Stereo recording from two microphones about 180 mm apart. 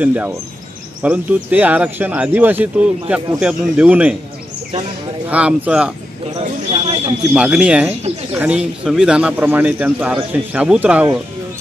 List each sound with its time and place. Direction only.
0.0 s a man's voice: 10° right (ahead or behind)
5.3 s a man's voice: 5° right (ahead or behind)
6.3 s a sound: 35° right (ahead or behind)
7.3 s a man's voice: 5° right (ahead or behind)